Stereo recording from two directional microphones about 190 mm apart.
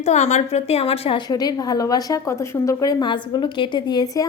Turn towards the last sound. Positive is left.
turn(degrees=20)  # may be behind; listen again after turning